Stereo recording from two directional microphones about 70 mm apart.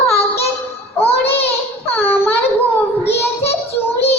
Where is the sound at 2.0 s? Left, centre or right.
Left.